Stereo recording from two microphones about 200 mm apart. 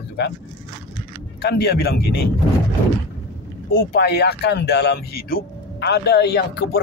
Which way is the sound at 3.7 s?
50° left (ahead or behind).